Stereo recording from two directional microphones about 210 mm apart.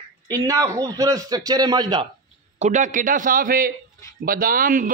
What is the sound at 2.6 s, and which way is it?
A man's voice, 35° right (ahead or behind).